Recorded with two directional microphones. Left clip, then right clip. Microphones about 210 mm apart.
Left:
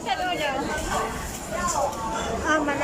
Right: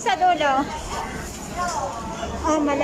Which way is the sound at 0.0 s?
30° right (ahead or behind).